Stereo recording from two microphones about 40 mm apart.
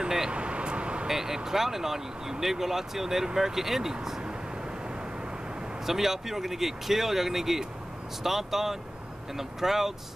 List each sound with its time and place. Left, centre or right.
0.0 s vehicle: centre
0.3 s vehicle: right
1.0 s speech: centre
5.9 s speech: centre